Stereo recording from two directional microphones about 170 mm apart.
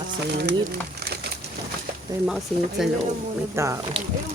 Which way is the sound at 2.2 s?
5° right (ahead or behind).